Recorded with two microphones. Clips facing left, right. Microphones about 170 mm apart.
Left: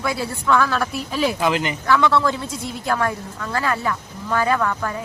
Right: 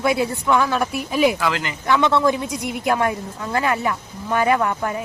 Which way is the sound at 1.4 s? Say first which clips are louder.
Left 3 dB; 20° left (ahead or behind).